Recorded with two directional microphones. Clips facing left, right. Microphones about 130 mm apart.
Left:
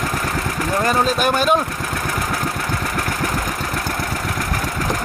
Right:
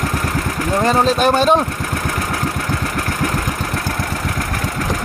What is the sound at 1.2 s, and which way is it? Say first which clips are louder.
Speech: right 4 dB; 30° right (ahead or behind).